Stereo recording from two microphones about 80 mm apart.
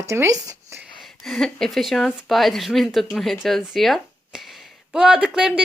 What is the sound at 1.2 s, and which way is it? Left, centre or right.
A woman's voice, centre.